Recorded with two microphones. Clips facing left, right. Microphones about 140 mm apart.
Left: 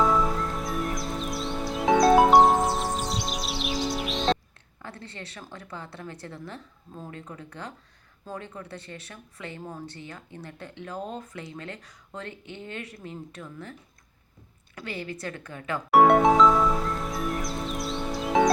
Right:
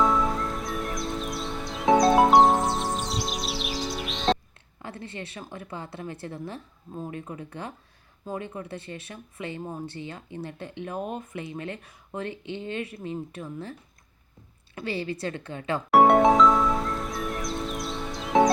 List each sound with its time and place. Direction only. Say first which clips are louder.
0.0 s music: even; centre (ahead or behind)
4.8 s a woman's voice: right 4 dB; 20° right (ahead or behind)
14.8 s speech: right 5 dB; 25° right (ahead or behind)
15.9 s music: even; centre (ahead or behind)